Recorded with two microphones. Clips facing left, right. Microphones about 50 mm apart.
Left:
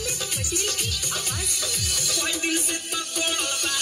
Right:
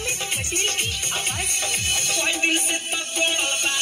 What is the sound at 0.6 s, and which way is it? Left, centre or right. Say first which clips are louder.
Music: right 3 dB; right.